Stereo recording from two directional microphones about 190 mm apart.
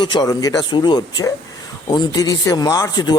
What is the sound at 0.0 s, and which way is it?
Speech, 20° left (ahead or behind).